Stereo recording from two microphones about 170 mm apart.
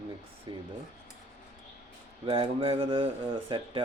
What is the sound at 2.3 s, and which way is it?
Speech, 30° right (ahead or behind).